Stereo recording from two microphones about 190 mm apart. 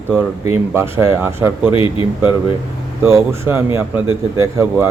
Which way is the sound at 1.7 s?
30° left (ahead or behind).